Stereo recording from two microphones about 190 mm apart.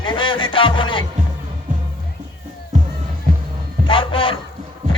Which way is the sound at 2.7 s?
40° right (ahead or behind).